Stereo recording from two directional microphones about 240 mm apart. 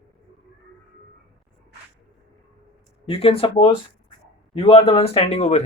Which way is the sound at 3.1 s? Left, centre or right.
Left.